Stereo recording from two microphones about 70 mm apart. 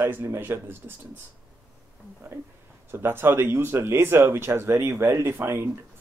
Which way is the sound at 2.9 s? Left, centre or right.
Right.